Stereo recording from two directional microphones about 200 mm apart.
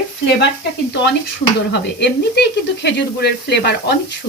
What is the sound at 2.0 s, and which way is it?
Speech, 60° left (ahead or behind).